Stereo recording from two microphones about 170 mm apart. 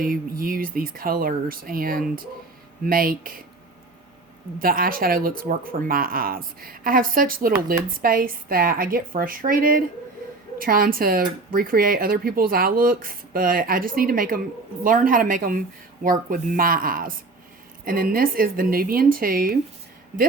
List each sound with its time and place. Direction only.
0.0 s speech: 60° right (ahead or behind)
4.6 s speech: 55° right (ahead or behind)